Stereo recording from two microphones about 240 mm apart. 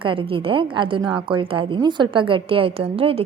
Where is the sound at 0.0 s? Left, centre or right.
Right.